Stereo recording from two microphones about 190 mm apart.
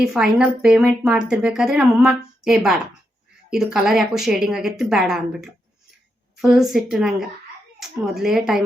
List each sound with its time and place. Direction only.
0.0 s speech: 5° right (ahead or behind)